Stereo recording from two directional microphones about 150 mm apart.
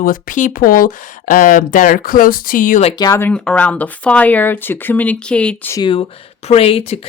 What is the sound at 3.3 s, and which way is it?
Speech, 5° left (ahead or behind).